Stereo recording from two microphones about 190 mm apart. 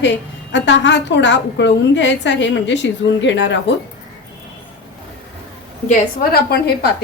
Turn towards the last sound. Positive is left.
turn(degrees=55)  # may be behind; listen again after turning